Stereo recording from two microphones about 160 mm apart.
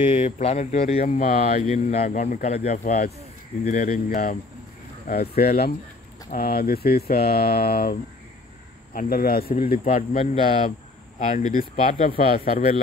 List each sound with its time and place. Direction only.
0.1 s speech: 40° left (ahead or behind)
1.0 s speech: 55° left (ahead or behind)
5.0 s speech: 75° left (ahead or behind)
10.1 s speech: 45° left (ahead or behind)